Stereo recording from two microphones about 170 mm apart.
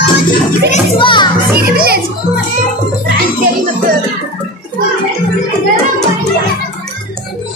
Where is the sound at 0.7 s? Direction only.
30° left (ahead or behind).